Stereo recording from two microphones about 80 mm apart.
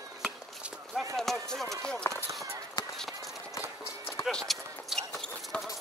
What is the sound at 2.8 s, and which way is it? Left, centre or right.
Run, left.